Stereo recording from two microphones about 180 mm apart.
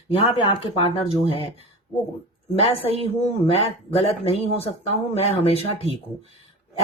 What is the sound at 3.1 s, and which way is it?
Speech, 35° left (ahead or behind).